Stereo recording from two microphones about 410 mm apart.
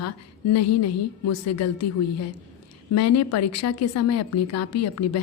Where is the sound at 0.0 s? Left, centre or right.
Left.